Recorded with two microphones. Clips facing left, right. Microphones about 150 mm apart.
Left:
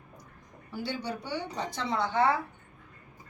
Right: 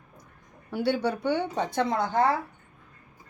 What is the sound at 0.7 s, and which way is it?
A woman's voice, 65° right (ahead or behind).